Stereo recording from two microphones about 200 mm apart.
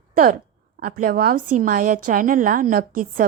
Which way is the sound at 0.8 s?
45° right (ahead or behind).